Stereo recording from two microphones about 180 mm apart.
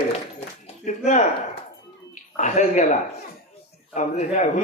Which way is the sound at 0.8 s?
45° left (ahead or behind).